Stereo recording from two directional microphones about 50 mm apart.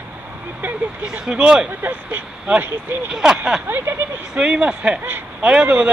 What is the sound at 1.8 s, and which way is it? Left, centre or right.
Speech, right.